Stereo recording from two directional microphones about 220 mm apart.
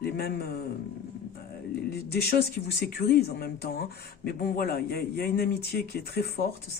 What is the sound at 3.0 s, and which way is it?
Speech, 45° left (ahead or behind).